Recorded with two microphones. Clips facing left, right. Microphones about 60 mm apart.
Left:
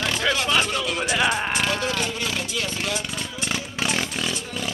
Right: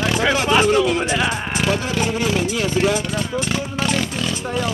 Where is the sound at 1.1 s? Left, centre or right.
Centre.